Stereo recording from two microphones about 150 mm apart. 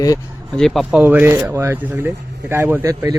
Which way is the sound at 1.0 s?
15° right (ahead or behind).